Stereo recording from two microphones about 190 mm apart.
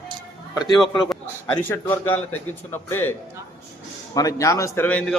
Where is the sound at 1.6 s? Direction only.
10° left (ahead or behind).